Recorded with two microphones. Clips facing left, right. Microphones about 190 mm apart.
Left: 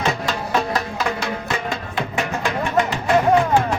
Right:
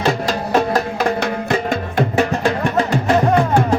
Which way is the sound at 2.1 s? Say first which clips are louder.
Right 6 dB; 35° right (ahead or behind).